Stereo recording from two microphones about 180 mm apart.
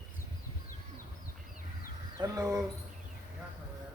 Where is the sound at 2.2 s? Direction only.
20° right (ahead or behind).